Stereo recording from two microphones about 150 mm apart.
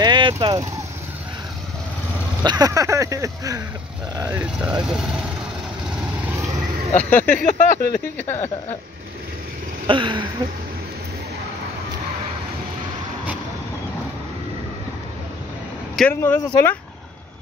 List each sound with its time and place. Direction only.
0.0 s vehicle: 30° right (ahead or behind)
2.4 s speech: 25° right (ahead or behind)
4.3 s speech: 10° right (ahead or behind)
6.2 s vehicle: 20° right (ahead or behind)
7.0 s speech: 10° left (ahead or behind)
7.3 s speech: 90° left
8.2 s speech: 15° left (ahead or behind)
9.8 s a sound: 35° right (ahead or behind)
16.1 s speech: 10° left (ahead or behind)